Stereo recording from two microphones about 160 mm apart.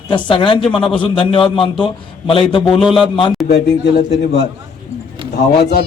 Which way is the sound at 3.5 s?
85° left.